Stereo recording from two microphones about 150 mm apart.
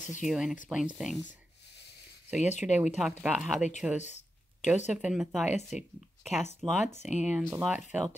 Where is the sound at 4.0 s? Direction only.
50° left (ahead or behind).